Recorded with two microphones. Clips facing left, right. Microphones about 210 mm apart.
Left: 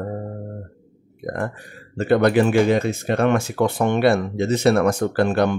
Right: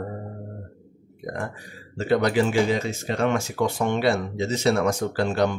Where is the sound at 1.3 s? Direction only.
60° left (ahead or behind).